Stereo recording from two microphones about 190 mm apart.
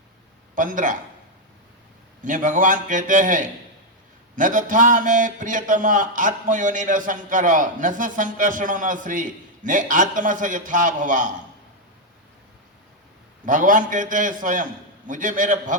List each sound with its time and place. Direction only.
0.5 s a man's voice: 45° right (ahead or behind)
2.2 s a man's voice: 45° right (ahead or behind)
13.4 s a man's voice: 45° right (ahead or behind)